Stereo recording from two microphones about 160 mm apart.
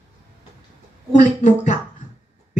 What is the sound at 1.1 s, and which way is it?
Speech, 50° left (ahead or behind).